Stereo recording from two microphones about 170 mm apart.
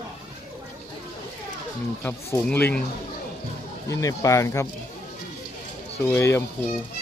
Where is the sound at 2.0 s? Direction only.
10° left (ahead or behind).